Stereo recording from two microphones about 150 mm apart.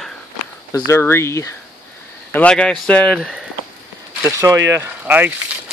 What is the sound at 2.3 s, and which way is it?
Speech, 5° left (ahead or behind).